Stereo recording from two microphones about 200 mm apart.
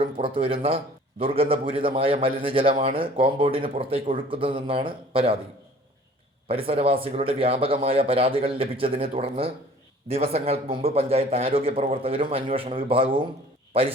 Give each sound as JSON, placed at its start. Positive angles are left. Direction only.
{"t": 0.0, "sound": "a man's voice", "side_deg": -25}
{"t": 6.5, "sound": "a man's voice", "side_deg": -30}